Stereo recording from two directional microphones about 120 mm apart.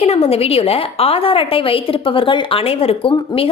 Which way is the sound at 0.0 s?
60° left (ahead or behind).